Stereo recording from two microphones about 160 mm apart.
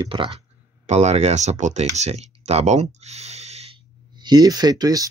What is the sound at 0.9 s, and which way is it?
Speech, 45° right (ahead or behind).